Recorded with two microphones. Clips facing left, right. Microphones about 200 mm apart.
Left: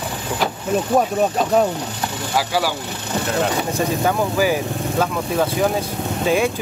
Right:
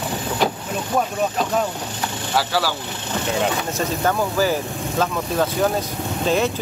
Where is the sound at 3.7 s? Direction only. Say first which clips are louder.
Left 2 dB; 10° left (ahead or behind).